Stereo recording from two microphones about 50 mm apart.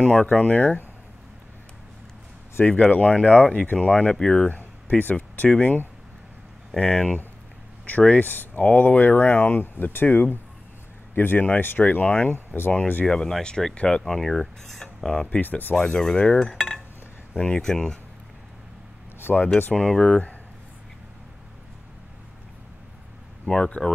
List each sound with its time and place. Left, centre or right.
0.0 s speech: centre
2.6 s speech: left
4.5 s a sound: left
5.1 s speech: left
6.8 s cutlery: centre
7.8 s speech: left
13.0 s cutlery: centre
13.7 s speech: centre
14.0 s cutlery: centre
15.0 s speech: centre
15.4 s speech: left
15.7 s cutlery: centre
19.3 s cutlery: centre
23.5 s cutlery: centre